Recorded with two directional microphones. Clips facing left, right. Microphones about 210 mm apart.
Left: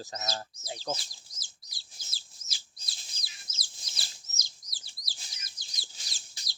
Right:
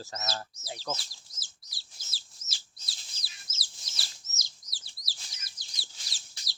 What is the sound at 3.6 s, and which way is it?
Bird, 20° left (ahead or behind).